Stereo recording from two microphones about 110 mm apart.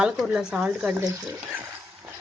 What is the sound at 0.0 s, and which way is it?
Speech, 5° right (ahead or behind).